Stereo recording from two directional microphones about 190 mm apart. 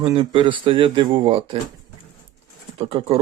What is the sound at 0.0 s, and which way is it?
Speech, 25° right (ahead or behind).